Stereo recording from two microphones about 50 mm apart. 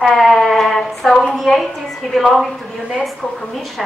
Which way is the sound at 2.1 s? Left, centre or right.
Centre.